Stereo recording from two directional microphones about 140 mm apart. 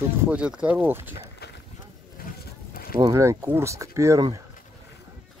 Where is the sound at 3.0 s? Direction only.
20° right (ahead or behind).